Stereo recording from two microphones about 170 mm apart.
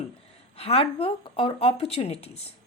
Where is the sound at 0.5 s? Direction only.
35° left (ahead or behind).